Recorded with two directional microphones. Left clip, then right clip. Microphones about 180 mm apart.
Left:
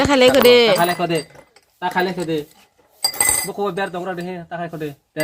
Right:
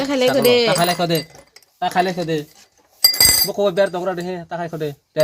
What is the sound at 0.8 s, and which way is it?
Speech, 90° right.